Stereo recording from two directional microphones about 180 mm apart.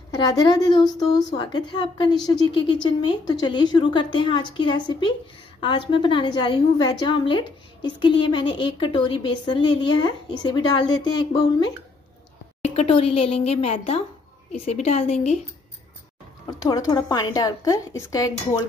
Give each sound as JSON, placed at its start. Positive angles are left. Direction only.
{"t": 0.1, "sound": "a woman's voice", "side_deg": 20}
{"t": 12.6, "sound": "a woman's voice", "side_deg": 35}
{"t": 16.4, "sound": "a woman's voice", "side_deg": 20}